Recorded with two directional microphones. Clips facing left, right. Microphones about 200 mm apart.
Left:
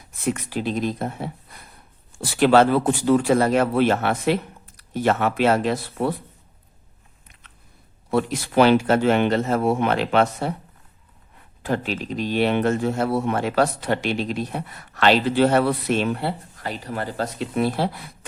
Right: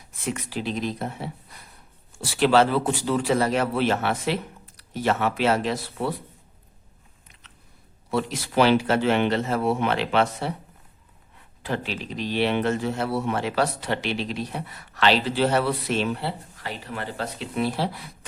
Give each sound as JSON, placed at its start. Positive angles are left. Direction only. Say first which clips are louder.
{"t": 0.3, "sound": "a man's voice", "louder": "left 4 dB", "side_deg": 50}
{"t": 8.1, "sound": "a man's voice", "louder": "left 4 dB", "side_deg": 50}
{"t": 11.6, "sound": "a man's voice", "louder": "left 4 dB", "side_deg": 45}